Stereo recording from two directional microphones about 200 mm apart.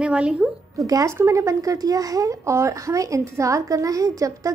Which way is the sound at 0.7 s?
15° right (ahead or behind).